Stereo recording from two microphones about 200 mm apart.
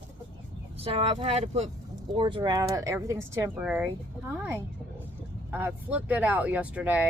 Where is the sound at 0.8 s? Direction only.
30° right (ahead or behind); by 3.8 s 10° right (ahead or behind).